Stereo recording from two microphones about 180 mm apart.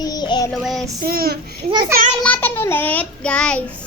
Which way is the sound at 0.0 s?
20° left (ahead or behind).